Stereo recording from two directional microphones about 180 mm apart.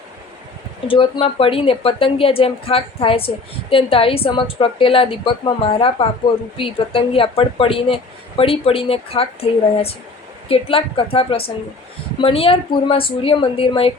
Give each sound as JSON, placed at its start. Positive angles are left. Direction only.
{"t": 0.9, "sound": "speech", "side_deg": 30}